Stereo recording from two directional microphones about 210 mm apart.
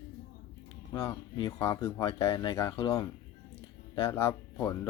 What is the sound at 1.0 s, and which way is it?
Speech, 15° left (ahead or behind).